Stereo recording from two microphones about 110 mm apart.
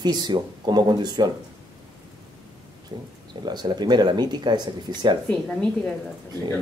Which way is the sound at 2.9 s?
35° right (ahead or behind).